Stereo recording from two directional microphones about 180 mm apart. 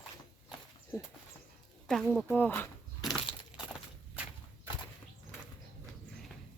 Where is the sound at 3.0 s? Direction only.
Centre (ahead or behind).